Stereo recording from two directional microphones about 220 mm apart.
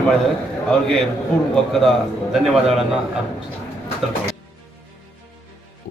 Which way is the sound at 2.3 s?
Centre (ahead or behind).